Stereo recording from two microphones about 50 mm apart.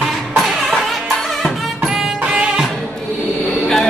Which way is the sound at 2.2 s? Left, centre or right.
Right.